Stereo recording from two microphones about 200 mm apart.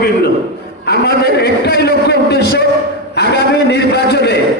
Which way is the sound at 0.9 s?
55° left (ahead or behind).